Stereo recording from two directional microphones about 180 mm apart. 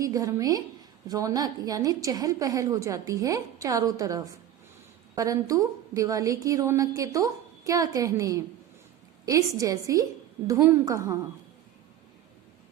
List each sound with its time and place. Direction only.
0.0 s a woman's voice: 20° right (ahead or behind)